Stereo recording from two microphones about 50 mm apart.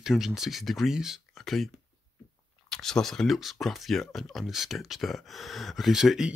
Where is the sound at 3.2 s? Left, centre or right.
Centre.